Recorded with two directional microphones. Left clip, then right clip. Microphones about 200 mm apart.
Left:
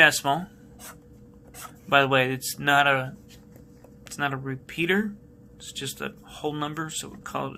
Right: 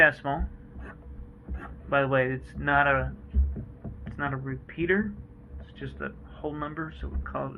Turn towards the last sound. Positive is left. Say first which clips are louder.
# left 2 dB
turn(degrees=45)  # may be behind; listen again after turning